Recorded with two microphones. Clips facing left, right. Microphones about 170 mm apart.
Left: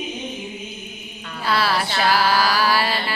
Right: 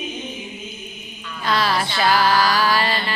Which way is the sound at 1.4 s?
10° left (ahead or behind).